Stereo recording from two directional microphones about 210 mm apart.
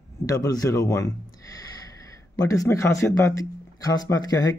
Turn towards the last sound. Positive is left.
turn(degrees=20)  # may be behind; listen again after turning